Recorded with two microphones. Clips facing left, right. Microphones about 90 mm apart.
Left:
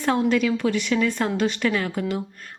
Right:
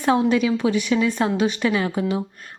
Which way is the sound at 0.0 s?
15° right (ahead or behind).